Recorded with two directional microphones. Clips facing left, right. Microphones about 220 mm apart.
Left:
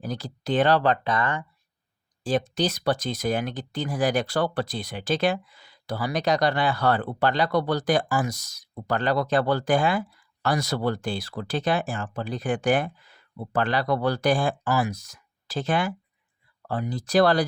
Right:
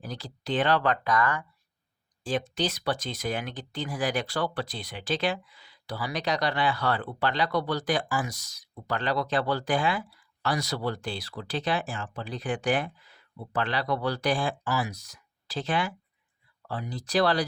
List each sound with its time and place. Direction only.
0.0 s speech: 45° left (ahead or behind); by 1.5 s 25° left (ahead or behind)
2.2 s speech: 40° left (ahead or behind)